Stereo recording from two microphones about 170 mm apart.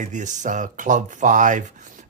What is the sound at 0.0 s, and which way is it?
Speech, 45° right (ahead or behind).